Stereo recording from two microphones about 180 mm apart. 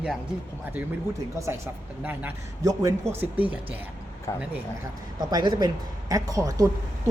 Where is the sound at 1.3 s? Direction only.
15° right (ahead or behind).